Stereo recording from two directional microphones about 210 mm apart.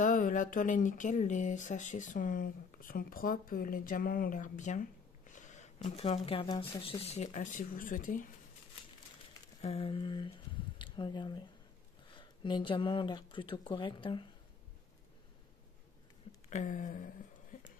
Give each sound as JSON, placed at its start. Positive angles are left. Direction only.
{"t": 0.0, "sound": "speech", "side_deg": 40}
{"t": 9.6, "sound": "speech", "side_deg": 30}
{"t": 16.4, "sound": "a sound", "side_deg": 35}